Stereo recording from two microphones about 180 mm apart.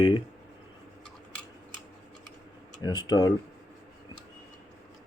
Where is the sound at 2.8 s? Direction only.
20° left (ahead or behind).